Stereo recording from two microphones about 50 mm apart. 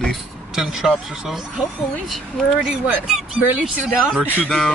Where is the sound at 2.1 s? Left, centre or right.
Centre.